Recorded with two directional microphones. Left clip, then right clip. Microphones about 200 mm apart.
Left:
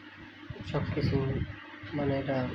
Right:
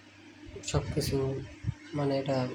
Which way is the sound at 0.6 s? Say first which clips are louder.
Right 1 dB; 15° right (ahead or behind).